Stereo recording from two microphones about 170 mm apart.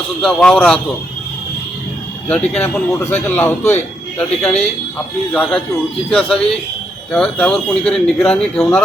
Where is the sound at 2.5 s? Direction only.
10° left (ahead or behind).